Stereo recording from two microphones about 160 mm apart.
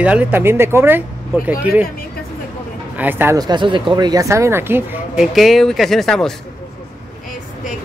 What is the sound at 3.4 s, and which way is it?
Speech, 30° right (ahead or behind).